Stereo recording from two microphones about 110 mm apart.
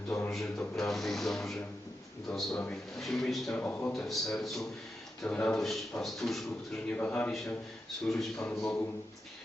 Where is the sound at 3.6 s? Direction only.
15° left (ahead or behind).